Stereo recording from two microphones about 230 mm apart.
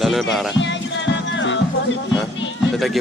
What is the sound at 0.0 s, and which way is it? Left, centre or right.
Speech, centre.